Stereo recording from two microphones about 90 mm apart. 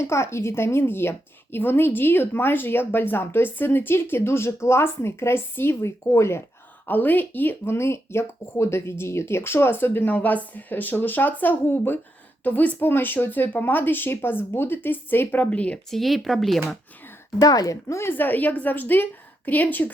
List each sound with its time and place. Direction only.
0.0 s speech: 30° left (ahead or behind); by 15.8 s 15° left (ahead or behind)
15.9 s speech: centre (ahead or behind)
17.4 s speech: 45° left (ahead or behind); by 19.9 s 20° left (ahead or behind)